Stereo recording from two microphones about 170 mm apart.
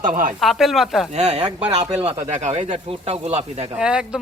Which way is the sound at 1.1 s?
40° right (ahead or behind).